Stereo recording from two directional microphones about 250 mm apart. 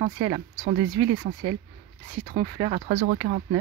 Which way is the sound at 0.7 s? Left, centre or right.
Right.